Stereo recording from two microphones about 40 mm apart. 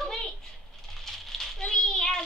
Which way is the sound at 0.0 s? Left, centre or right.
Centre.